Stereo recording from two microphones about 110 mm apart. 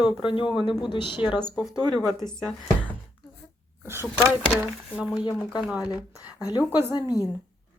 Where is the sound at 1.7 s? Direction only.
40° right (ahead or behind).